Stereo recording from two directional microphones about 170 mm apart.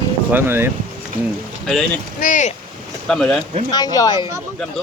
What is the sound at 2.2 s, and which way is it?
Speech, 45° left (ahead or behind).